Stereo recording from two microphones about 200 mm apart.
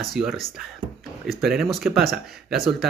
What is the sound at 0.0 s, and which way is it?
Speech, centre (ahead or behind).